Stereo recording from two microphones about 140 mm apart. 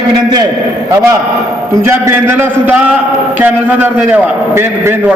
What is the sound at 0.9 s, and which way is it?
A man's voice, 20° right (ahead or behind).